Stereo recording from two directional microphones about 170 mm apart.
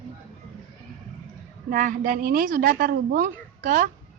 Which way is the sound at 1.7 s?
55° right (ahead or behind).